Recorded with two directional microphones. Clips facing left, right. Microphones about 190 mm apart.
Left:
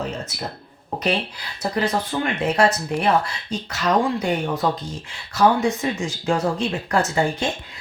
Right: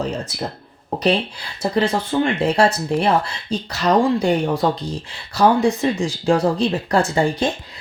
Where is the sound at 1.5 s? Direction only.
30° right (ahead or behind).